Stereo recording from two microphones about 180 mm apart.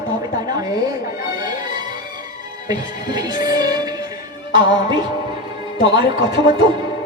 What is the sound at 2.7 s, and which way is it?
Speech, 20° right (ahead or behind).